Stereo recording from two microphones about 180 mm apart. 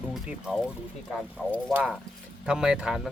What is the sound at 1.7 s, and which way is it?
Speech, 10° right (ahead or behind).